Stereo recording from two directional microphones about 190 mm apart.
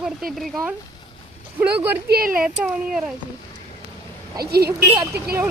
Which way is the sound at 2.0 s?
50° right (ahead or behind).